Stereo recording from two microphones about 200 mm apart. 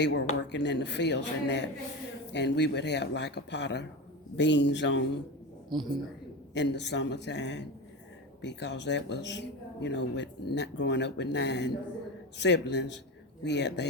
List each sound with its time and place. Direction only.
0.0 s speech: 60° left (ahead or behind)
5.7 s a woman's voice: 20° right (ahead or behind)
6.5 s speech: 60° left (ahead or behind)